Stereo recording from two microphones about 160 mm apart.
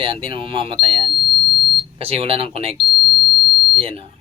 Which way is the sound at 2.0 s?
40° right (ahead or behind).